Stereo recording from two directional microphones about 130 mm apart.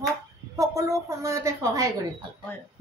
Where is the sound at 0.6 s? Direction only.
25° right (ahead or behind).